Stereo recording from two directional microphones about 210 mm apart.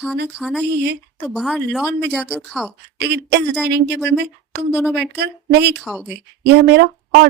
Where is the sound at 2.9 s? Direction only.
55° right (ahead or behind).